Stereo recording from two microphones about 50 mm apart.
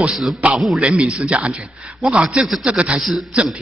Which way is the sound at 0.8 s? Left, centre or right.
Right.